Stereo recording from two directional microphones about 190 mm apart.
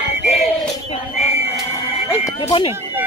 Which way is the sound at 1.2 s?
35° left (ahead or behind).